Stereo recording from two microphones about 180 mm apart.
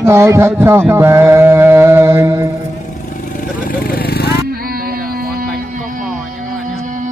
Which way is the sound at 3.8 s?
55° left (ahead or behind).